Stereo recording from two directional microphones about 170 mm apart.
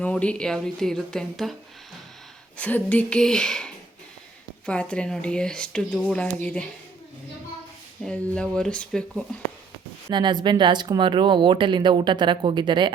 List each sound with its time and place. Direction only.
0.0 s speech: 5° left (ahead or behind)
2.6 s speech: 10° left (ahead or behind)
8.0 s speech: 5° left (ahead or behind)
10.1 s speech: 25° right (ahead or behind)